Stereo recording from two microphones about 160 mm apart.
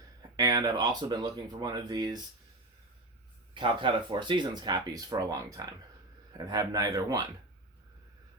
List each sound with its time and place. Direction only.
0.3 s speech: 25° right (ahead or behind)
3.5 s speech: 30° right (ahead or behind)